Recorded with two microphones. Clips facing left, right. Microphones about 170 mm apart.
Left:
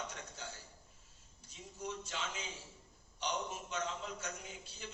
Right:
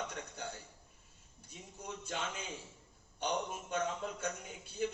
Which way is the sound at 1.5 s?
55° right (ahead or behind).